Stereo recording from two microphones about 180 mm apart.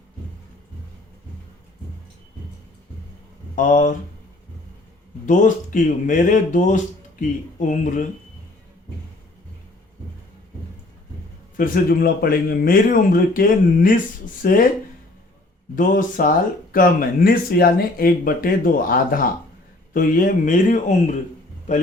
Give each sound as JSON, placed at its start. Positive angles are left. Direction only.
{"t": 3.5, "sound": "speech", "side_deg": 45}
{"t": 5.2, "sound": "speech", "side_deg": 45}
{"t": 11.5, "sound": "speech", "side_deg": 50}
{"t": 15.7, "sound": "speech", "side_deg": 50}